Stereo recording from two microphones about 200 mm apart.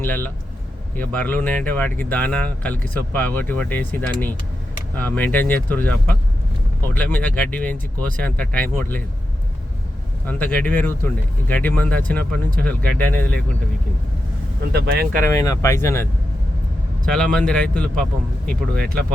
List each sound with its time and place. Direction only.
0.0 s speech: 10° left (ahead or behind)
10.2 s speech: 10° left (ahead or behind)
14.7 s speech: 55° right (ahead or behind)
15.3 s speech: 15° left (ahead or behind)
17.3 s speech: 5° left (ahead or behind)